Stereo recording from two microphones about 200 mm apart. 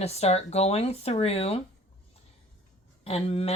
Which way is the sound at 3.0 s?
30° left (ahead or behind).